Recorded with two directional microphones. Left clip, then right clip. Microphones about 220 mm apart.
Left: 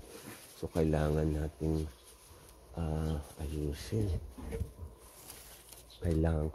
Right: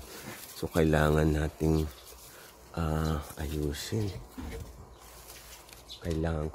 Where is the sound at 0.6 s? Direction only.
5° right (ahead or behind).